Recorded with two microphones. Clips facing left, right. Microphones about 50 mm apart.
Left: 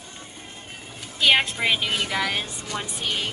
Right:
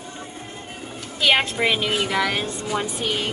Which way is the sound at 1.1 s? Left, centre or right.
Centre.